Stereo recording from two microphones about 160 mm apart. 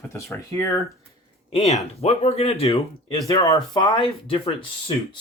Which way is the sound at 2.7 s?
20° left (ahead or behind).